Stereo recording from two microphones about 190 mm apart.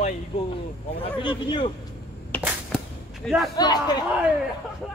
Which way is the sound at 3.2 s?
Centre (ahead or behind).